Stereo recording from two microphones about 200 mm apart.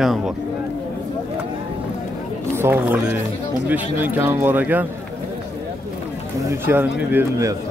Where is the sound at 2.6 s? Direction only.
10° right (ahead or behind).